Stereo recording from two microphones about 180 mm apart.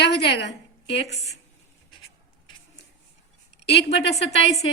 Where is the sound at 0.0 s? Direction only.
70° left (ahead or behind).